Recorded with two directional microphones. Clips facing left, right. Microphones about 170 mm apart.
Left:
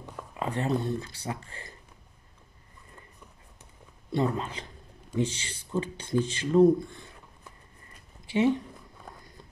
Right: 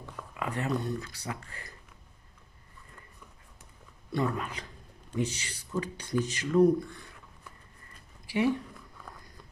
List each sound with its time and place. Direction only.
0.1 s speech: 30° left (ahead or behind)
4.1 s speech: 25° left (ahead or behind)
8.3 s speech: 25° left (ahead or behind)